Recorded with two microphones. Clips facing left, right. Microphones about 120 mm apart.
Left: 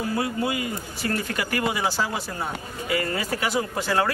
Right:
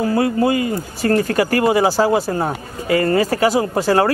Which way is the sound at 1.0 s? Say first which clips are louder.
Right 12 dB; 45° right (ahead or behind).